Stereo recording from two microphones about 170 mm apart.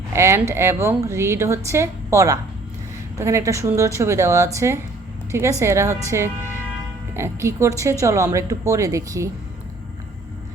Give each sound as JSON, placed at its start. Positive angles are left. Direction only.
{"t": 0.1, "sound": "a woman's voice", "side_deg": -15}